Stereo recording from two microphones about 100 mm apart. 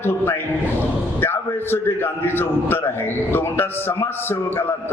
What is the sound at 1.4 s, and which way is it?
A man's voice, 20° left (ahead or behind).